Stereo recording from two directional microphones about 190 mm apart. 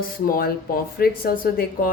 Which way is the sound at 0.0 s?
50° left (ahead or behind).